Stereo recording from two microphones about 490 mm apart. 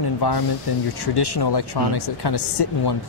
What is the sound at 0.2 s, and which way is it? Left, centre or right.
Speech, left.